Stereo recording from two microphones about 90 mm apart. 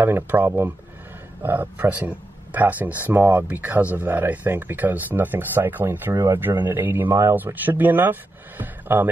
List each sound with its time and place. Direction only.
0.0 s speech: 20° right (ahead or behind)